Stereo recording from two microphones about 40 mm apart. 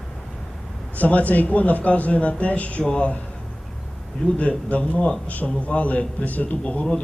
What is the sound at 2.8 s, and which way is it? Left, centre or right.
Speech, left.